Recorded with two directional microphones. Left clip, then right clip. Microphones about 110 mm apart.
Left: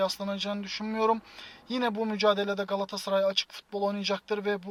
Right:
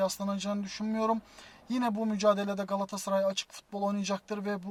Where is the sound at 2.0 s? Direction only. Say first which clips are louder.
Left 1 dB; 40° right (ahead or behind).